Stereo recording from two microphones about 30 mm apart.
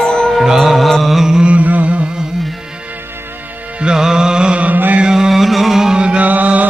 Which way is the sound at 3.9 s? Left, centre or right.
Right.